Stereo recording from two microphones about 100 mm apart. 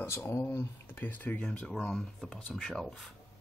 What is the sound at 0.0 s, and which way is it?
Speech, 25° left (ahead or behind).